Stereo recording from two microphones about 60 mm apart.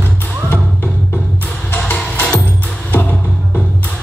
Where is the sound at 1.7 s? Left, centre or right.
Left.